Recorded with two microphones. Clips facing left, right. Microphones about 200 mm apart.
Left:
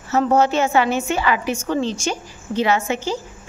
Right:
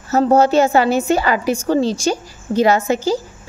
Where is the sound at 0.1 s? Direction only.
35° right (ahead or behind).